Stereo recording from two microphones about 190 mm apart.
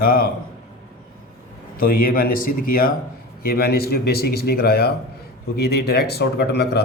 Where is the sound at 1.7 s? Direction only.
50° left (ahead or behind).